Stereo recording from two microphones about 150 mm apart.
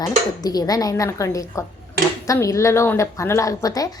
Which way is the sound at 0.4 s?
25° left (ahead or behind).